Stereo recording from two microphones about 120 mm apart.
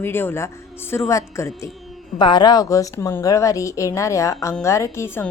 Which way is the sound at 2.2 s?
40° left (ahead or behind).